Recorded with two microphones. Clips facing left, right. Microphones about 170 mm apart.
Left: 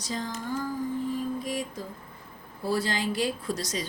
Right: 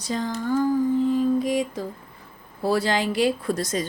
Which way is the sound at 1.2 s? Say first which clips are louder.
Right 9 dB; 90° right.